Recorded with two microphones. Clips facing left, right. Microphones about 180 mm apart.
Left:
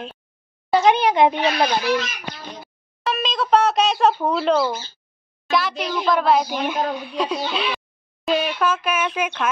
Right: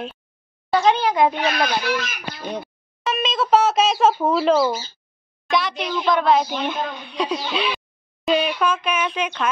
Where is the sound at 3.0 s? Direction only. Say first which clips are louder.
Right 1 dB; centre (ahead or behind).